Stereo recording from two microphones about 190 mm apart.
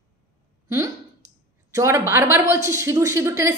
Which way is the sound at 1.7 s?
15° right (ahead or behind).